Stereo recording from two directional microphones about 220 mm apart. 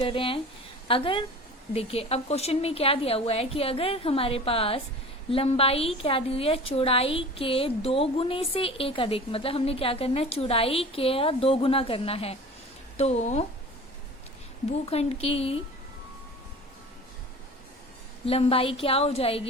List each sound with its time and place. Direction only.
0.0 s a woman's voice: 25° left (ahead or behind)
14.8 s a woman's voice: 30° left (ahead or behind)
18.3 s a woman's voice: 25° left (ahead or behind)